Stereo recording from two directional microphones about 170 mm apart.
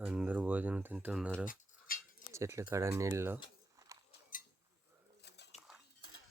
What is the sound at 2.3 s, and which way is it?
Speech, 15° right (ahead or behind).